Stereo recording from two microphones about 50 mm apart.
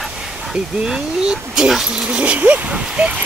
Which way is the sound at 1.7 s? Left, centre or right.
Centre.